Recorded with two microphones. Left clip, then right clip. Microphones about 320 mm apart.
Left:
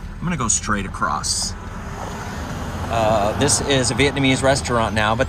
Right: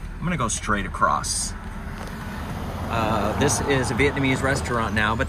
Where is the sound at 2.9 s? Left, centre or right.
Centre.